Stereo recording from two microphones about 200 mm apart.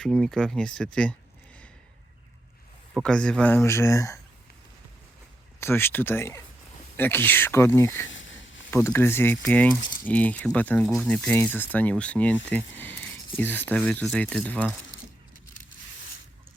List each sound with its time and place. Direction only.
0.0 s speech: 5° left (ahead or behind)
2.9 s speech: 5° left (ahead or behind)
5.5 s speech: 10° left (ahead or behind)
8.0 s a sound: 70° left (ahead or behind)
8.7 s speech: 10° left (ahead or behind)